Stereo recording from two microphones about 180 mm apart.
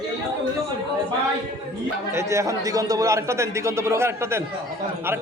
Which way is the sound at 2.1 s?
15° right (ahead or behind).